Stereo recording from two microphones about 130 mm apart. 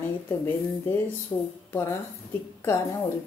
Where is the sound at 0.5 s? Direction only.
15° left (ahead or behind).